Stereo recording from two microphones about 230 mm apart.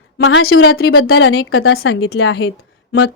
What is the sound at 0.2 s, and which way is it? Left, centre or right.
A woman's voice, left.